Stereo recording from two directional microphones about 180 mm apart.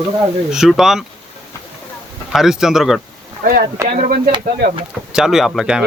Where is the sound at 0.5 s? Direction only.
Centre (ahead or behind).